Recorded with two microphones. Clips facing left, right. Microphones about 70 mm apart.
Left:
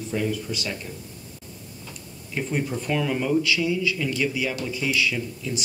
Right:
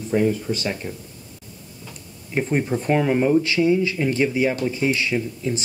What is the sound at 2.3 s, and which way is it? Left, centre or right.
Speech, right.